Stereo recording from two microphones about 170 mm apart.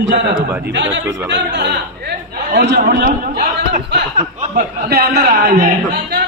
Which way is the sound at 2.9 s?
70° right (ahead or behind).